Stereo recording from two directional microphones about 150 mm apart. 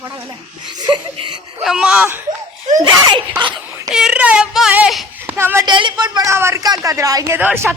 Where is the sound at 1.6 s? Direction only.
5° right (ahead or behind).